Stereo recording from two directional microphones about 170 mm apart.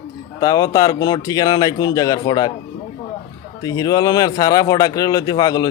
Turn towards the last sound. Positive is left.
turn(degrees=20)  # may be behind; listen again after turning